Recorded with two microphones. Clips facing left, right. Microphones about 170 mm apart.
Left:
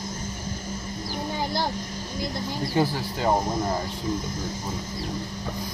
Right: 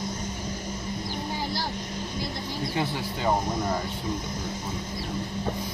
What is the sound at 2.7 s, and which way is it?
Speech, 35° left (ahead or behind).